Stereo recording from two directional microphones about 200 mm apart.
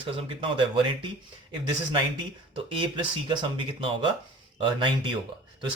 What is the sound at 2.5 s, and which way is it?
Speech, 25° right (ahead or behind).